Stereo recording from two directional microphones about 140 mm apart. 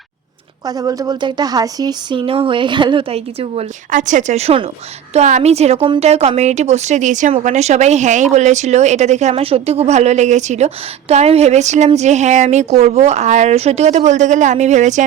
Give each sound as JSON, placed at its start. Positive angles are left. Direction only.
{"t": 0.8, "sound": "speech", "side_deg": -25}
{"t": 3.9, "sound": "speech", "side_deg": -65}